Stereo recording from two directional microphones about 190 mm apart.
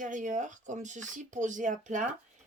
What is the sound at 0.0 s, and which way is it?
Speech, 40° right (ahead or behind).